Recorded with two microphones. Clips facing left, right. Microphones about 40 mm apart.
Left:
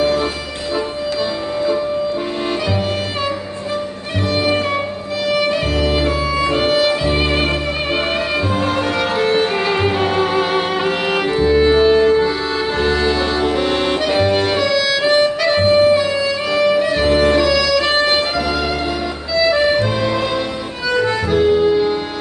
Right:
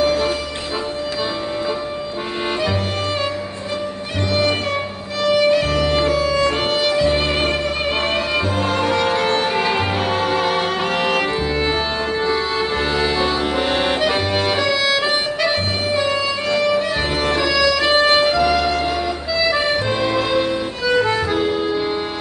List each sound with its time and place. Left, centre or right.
5.2 s music: centre
6.5 s violin: centre
8.7 s music: centre
14.7 s music: centre
16.4 s music: centre
19.4 s accordion: centre
20.9 s music: centre